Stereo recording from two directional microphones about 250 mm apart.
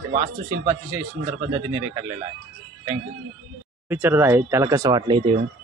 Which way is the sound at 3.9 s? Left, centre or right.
Centre.